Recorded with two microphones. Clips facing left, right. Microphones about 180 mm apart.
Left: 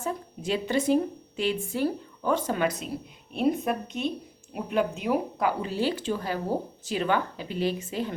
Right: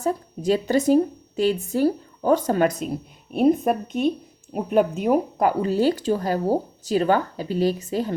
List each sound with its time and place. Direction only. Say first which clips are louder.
0.0 s a woman's voice: right 8 dB; 40° right (ahead or behind)